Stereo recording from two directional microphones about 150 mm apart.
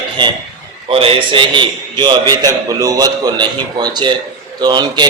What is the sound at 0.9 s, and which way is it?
A man's voice, 40° right (ahead or behind).